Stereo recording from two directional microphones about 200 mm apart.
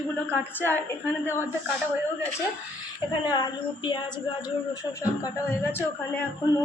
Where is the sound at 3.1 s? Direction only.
20° left (ahead or behind).